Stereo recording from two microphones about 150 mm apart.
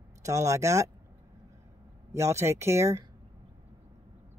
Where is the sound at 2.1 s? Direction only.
20° right (ahead or behind).